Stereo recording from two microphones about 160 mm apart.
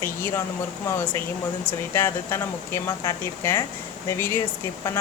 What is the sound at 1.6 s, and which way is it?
A woman's voice, 15° left (ahead or behind).